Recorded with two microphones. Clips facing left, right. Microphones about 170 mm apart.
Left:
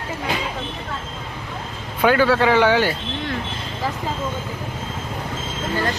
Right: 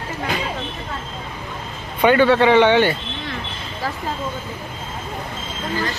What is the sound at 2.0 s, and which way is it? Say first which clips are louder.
Speech: right 2 dB; centre (ahead or behind).